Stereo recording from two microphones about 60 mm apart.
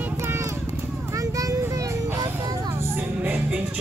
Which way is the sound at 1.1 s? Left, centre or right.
Right.